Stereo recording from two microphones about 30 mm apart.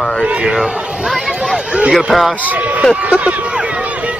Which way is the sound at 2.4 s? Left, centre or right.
Right.